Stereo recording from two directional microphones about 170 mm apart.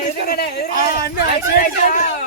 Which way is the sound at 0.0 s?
65° left (ahead or behind).